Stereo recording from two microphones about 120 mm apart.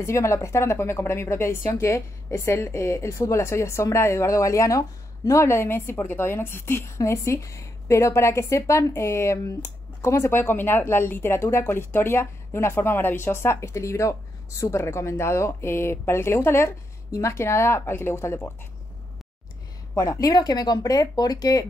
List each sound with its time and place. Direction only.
0.0 s a woman's voice: 25° left (ahead or behind)
19.9 s speech: 30° left (ahead or behind)